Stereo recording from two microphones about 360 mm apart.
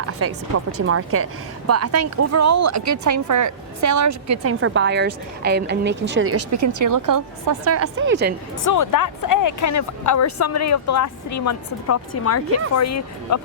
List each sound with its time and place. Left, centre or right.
0.2 s speech: right
7.7 s a woman's voice: right
8.6 s speech: left